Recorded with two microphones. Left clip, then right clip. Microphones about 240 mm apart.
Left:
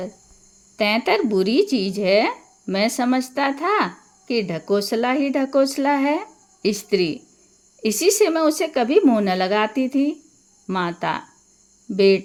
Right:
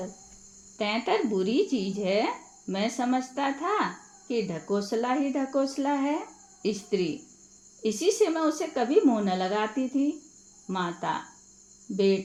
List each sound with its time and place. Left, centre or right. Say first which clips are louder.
0.8 s speech: left 8 dB; left